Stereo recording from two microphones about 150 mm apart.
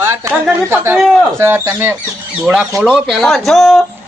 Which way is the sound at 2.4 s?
5° right (ahead or behind).